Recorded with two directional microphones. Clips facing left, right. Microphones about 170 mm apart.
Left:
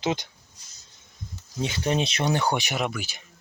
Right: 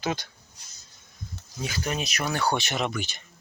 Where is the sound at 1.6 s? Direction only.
25° left (ahead or behind); by 3.2 s 5° left (ahead or behind).